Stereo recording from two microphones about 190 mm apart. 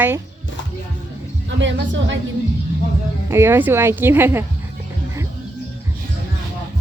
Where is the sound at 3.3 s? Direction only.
10° right (ahead or behind).